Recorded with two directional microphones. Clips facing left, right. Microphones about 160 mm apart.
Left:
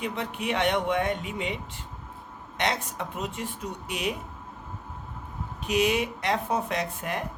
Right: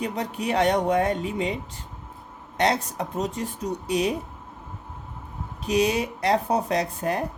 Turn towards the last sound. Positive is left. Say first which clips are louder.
# right 5 dB
turn(degrees=-35)  # may be behind; listen again after turning